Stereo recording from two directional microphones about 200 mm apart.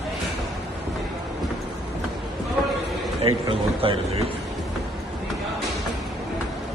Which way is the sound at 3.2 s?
25° right (ahead or behind).